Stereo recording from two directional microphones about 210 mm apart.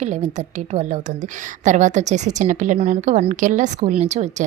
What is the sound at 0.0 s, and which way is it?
Speech, 30° right (ahead or behind).